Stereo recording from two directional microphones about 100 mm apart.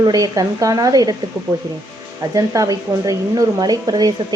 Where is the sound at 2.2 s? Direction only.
35° right (ahead or behind).